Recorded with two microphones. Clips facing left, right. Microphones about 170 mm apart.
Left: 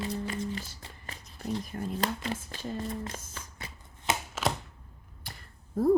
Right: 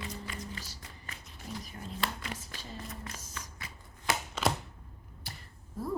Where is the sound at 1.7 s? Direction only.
50° left (ahead or behind).